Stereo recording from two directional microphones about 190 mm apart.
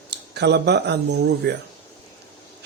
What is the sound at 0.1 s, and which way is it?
Speech, 60° right (ahead or behind).